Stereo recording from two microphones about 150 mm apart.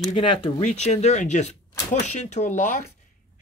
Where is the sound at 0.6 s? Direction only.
50° left (ahead or behind).